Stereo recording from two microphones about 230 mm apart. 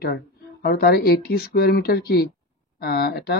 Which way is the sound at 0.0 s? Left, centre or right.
Left.